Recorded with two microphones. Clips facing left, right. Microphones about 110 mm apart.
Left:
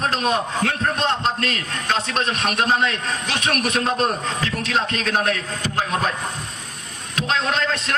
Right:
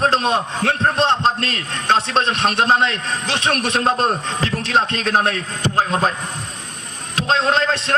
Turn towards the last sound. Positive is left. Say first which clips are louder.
# right 4 dB
turn(degrees=-30)  # may be behind; listen again after turning